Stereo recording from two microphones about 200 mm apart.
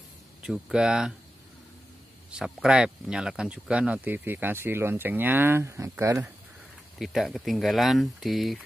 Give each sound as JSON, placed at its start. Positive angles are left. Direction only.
{"t": 0.4, "sound": "speech", "side_deg": -5}
{"t": 2.3, "sound": "speech", "side_deg": -5}
{"t": 7.0, "sound": "speech", "side_deg": 0}